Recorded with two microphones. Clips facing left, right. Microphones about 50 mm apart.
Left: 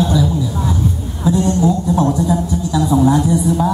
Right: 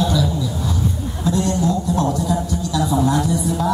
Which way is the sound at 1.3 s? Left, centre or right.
Centre.